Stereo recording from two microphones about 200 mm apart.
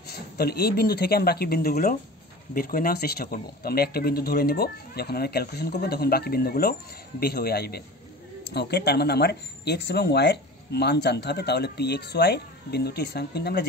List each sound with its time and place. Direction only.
0.0 s speech: 50° left (ahead or behind)